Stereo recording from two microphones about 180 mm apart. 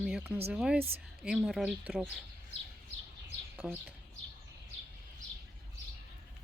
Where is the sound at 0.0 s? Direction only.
5° right (ahead or behind).